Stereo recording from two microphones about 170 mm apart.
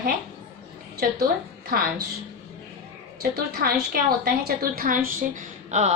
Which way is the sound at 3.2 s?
65° right (ahead or behind).